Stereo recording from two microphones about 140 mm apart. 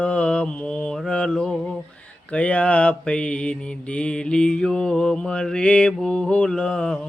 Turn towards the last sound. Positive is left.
turn(degrees=5)  # may be behind; listen again after turning